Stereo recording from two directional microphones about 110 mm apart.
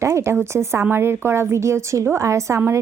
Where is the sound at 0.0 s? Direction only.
25° right (ahead or behind).